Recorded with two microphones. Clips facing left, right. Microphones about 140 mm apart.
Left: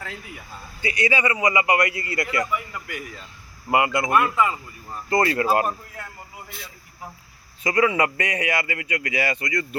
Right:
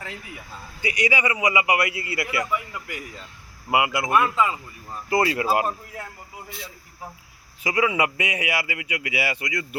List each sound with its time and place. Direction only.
0.8 s a man's voice: 15° right (ahead or behind)
3.7 s a man's voice: 10° right (ahead or behind)
7.6 s a man's voice: 10° right (ahead or behind)